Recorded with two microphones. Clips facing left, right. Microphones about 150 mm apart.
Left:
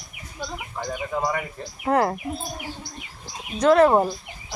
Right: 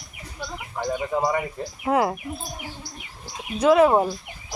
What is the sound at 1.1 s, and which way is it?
Speech, 20° right (ahead or behind).